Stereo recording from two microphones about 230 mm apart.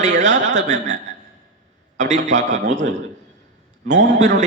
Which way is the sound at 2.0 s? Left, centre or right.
Right.